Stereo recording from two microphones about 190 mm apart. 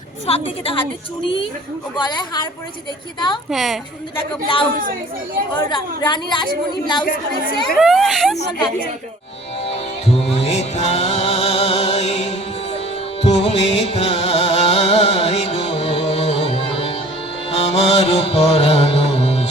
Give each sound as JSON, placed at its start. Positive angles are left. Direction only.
{"t": 0.3, "sound": "a woman's voice", "side_deg": 30}
{"t": 2.0, "sound": "a woman's voice", "side_deg": 25}
{"t": 3.5, "sound": "speech", "side_deg": 0}
{"t": 4.4, "sound": "a woman's voice", "side_deg": 25}
{"t": 7.0, "sound": "speech", "side_deg": 50}
{"t": 7.8, "sound": "speech", "side_deg": 0}
{"t": 9.6, "sound": "music", "side_deg": 30}